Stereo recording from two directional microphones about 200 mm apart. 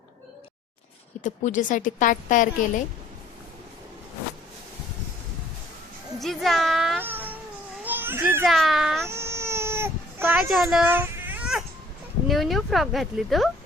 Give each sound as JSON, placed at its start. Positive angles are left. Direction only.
{"t": 1.2, "sound": "speech", "side_deg": 40}
{"t": 6.1, "sound": "music", "side_deg": 0}
{"t": 7.9, "sound": "children playing", "side_deg": -10}
{"t": 8.4, "sound": "speech", "side_deg": 0}
{"t": 9.0, "sound": "baby cry", "side_deg": -15}
{"t": 10.3, "sound": "speech", "side_deg": 0}